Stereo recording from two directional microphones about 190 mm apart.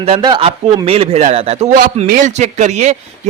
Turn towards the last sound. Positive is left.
turn(degrees=-35)  # may be behind; listen again after turning